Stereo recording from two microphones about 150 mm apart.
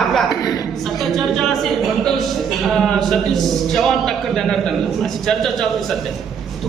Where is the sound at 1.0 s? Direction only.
Centre (ahead or behind).